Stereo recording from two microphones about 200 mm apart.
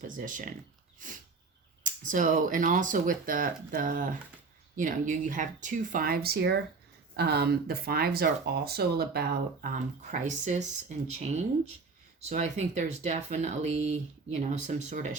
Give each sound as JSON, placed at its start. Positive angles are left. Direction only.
{"t": 0.1, "sound": "speech", "side_deg": -40}
{"t": 0.9, "sound": "a sound", "side_deg": -40}
{"t": 1.8, "sound": "speech", "side_deg": -40}